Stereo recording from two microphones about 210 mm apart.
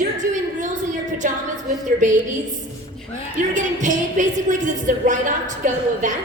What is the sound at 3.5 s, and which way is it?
A woman's voice, 35° right (ahead or behind).